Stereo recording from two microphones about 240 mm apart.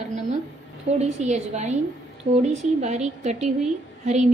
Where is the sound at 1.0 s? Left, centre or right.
Right.